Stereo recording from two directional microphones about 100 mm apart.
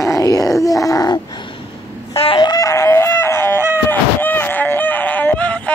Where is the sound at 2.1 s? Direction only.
65° left (ahead or behind).